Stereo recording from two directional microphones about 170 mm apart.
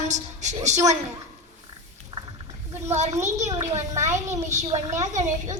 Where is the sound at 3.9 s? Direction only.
15° right (ahead or behind).